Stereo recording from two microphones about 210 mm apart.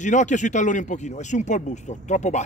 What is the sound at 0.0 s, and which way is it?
Speech, 35° left (ahead or behind).